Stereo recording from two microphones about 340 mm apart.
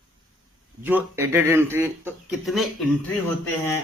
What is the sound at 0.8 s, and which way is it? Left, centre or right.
Speech, centre.